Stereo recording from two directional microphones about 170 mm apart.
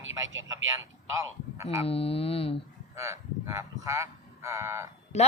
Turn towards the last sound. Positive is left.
turn(degrees=40)  # may be behind; listen again after turning